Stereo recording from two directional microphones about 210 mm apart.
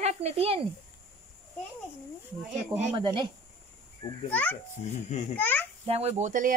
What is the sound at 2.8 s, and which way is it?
Speech, 30° right (ahead or behind).